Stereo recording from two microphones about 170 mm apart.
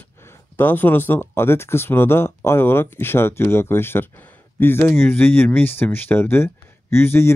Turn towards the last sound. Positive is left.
turn(degrees=15)  # may be behind; listen again after turning